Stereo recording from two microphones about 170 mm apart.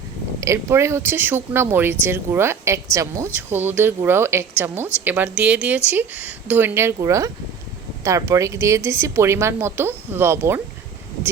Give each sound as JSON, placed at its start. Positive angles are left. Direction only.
{"t": 0.3, "sound": "speech", "side_deg": -15}